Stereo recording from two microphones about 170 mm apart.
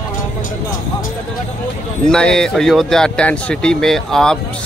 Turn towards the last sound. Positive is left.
turn(degrees=5)  # may be behind; listen again after turning